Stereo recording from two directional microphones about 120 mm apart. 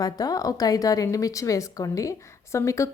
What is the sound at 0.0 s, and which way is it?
A woman's voice, 30° left (ahead or behind).